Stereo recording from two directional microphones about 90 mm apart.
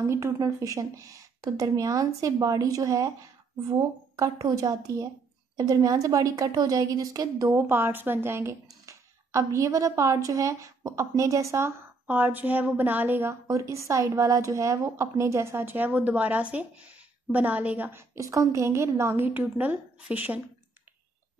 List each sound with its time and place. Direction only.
0.0 s speech: 35° right (ahead or behind)
4.2 s speech: 40° right (ahead or behind)
7.4 s speech: 25° right (ahead or behind)
12.1 s a woman's voice: 20° right (ahead or behind)
18.1 s a woman's voice: 35° right (ahead or behind); by 20.3 s 20° right (ahead or behind)